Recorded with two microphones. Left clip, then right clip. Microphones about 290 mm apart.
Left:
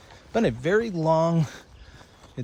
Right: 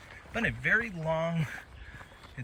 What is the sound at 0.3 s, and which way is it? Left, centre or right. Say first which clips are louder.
Speech: left 5 dB; centre.